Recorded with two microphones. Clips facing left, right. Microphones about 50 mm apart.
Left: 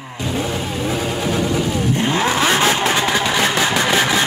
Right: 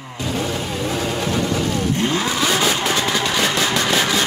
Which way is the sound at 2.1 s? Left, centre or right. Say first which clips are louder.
Left 3 dB; left.